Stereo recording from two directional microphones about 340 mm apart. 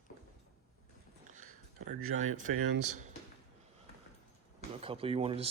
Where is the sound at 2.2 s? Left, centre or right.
Right.